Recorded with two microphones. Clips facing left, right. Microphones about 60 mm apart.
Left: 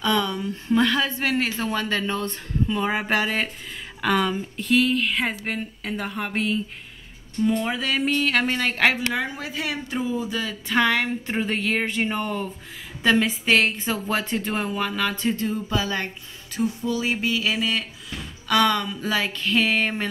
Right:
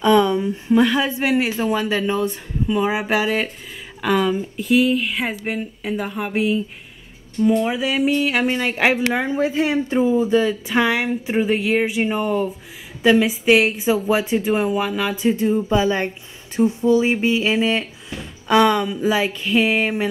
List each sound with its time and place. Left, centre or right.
0.0 s a woman's voice: right
9.2 s speech: right
10.5 s a woman's voice: centre